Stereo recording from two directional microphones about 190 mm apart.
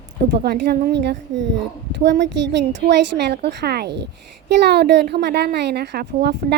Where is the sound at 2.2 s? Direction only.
65° right (ahead or behind).